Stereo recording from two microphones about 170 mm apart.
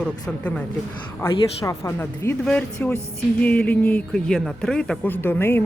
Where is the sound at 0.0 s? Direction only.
10° left (ahead or behind).